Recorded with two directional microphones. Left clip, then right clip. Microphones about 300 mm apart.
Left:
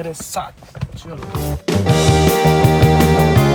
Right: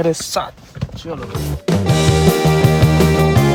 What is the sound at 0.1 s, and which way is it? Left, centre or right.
Speech, right.